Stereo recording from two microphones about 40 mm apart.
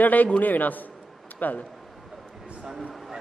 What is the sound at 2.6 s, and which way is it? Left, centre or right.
Speech, centre.